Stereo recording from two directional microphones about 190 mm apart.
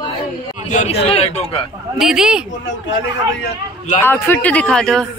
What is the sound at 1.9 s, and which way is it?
Speech, centre (ahead or behind).